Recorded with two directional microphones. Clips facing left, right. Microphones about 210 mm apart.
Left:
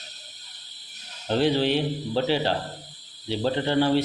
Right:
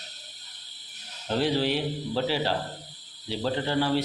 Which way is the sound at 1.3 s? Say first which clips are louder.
Left 3 dB; 25° left (ahead or behind).